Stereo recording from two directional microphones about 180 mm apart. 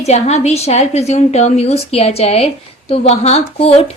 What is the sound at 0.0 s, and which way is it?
A woman's voice, 35° left (ahead or behind).